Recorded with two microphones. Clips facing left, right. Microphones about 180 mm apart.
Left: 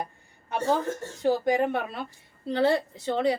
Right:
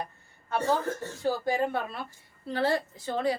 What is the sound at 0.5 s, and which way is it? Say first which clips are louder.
A woman's voice: left 1 dB; 20° left (ahead or behind).